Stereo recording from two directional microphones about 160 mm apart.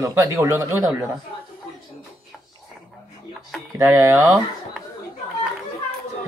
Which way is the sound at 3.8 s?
15° right (ahead or behind).